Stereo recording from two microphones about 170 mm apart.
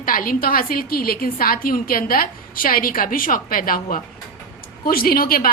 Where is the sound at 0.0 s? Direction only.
55° left (ahead or behind).